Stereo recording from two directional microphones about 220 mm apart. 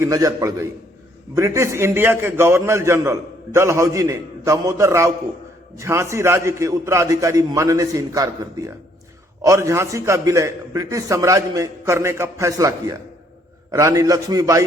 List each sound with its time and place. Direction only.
0.0 s a man's voice: 15° right (ahead or behind)